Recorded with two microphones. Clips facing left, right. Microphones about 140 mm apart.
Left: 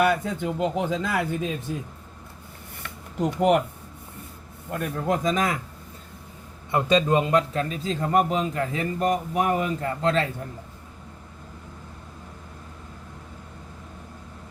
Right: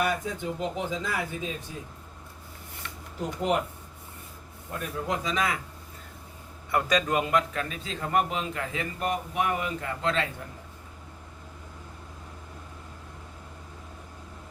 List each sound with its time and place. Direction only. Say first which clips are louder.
0.0 s a man's voice: left 6 dB; 60° left (ahead or behind)
2.8 s a sound: left 7 dB; 65° left (ahead or behind)
4.7 s a man's voice: left 5 dB; 50° left (ahead or behind)
6.7 s a man's voice: left 5 dB; 25° left (ahead or behind)